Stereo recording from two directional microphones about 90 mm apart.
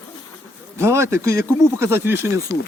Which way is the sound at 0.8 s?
30° right (ahead or behind).